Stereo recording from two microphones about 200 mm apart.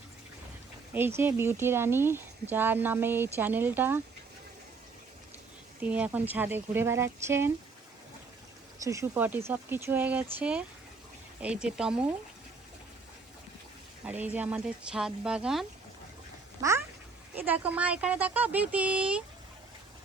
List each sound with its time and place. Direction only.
0.9 s speech: 10° right (ahead or behind)
5.8 s speech: 5° right (ahead or behind)
8.8 s speech: 15° right (ahead or behind)
14.0 s speech: 10° right (ahead or behind)
16.6 s speech: 15° right (ahead or behind)